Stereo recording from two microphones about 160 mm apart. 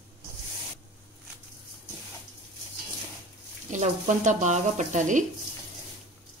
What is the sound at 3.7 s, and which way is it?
Speech, 50° right (ahead or behind).